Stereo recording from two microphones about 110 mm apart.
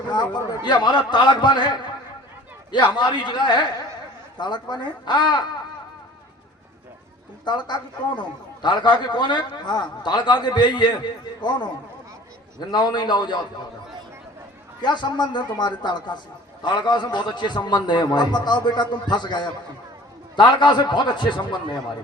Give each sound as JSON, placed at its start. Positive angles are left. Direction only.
{"t": 0.1, "sound": "a man's voice", "side_deg": 40}
{"t": 7.4, "sound": "a man's voice", "side_deg": 45}
{"t": 14.8, "sound": "a man's voice", "side_deg": 45}